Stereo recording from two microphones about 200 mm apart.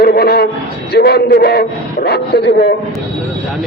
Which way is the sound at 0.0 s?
50° left (ahead or behind).